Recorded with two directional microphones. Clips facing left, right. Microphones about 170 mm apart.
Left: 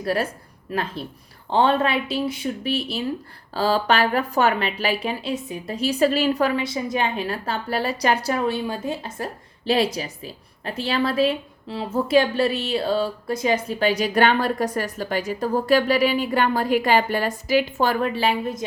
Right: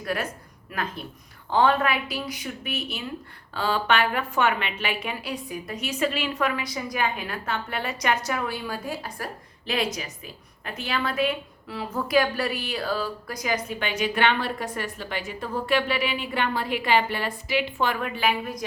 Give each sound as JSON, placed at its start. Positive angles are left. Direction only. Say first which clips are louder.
{"t": 0.0, "sound": "a woman's voice", "louder": "left 5 dB", "side_deg": 30}